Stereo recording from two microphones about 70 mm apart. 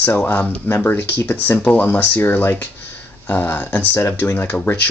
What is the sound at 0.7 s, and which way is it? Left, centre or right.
Speech, left.